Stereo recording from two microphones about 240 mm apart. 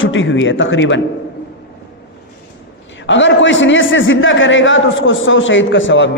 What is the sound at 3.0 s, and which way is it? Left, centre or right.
A man's voice, left.